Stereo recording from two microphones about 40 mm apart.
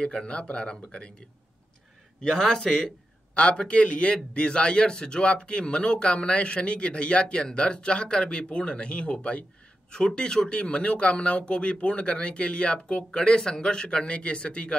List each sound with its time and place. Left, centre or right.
0.0 s speech: left
2.3 s speech: centre
3.3 s speech: left
9.8 s speech: centre